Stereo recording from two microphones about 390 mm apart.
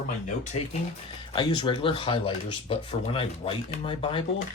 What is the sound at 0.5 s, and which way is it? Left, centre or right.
Speech, centre.